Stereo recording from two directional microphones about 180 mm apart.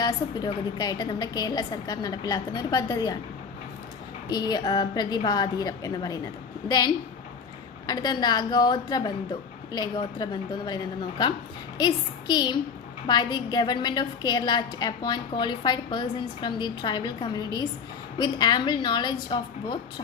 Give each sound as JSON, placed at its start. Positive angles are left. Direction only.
{"t": 0.0, "sound": "a woman's voice", "side_deg": 20}
{"t": 4.3, "sound": "a woman's voice", "side_deg": 20}
{"t": 11.8, "sound": "a woman's voice", "side_deg": 25}